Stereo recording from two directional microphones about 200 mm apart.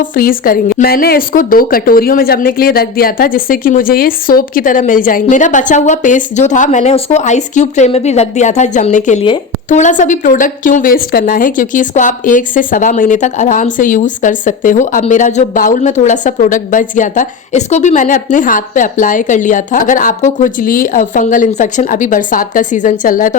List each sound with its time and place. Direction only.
0.0 s a woman's voice: 45° left (ahead or behind)